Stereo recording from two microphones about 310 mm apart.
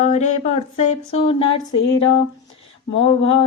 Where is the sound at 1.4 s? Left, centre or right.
Left.